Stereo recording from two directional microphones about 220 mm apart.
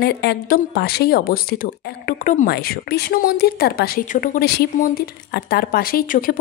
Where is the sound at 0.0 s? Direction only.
50° left (ahead or behind).